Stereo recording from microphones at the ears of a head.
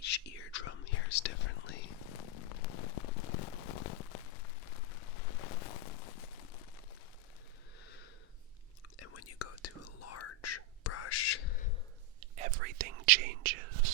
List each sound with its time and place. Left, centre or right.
0.0 s whispering: left
9.0 s whispering: left
12.2 s whispering: right